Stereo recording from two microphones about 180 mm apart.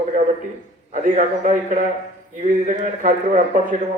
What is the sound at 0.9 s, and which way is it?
Speech, 45° right (ahead or behind).